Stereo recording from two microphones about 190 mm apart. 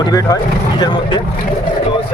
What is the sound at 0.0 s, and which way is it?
Speech, 20° left (ahead or behind).